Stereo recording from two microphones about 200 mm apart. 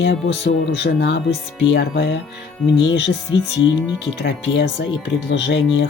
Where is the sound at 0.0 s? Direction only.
60° left (ahead or behind).